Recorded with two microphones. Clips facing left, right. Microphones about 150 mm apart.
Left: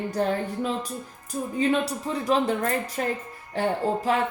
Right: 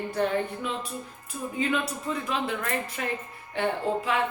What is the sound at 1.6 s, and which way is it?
A woman's voice, 35° left (ahead or behind).